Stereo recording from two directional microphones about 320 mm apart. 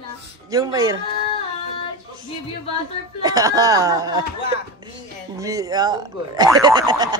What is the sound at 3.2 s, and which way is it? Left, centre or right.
Speech, centre.